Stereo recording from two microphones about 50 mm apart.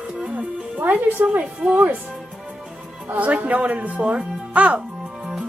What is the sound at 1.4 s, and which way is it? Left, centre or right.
Speech, centre.